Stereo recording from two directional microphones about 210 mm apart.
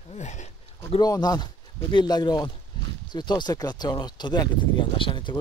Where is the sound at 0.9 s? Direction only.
20° left (ahead or behind).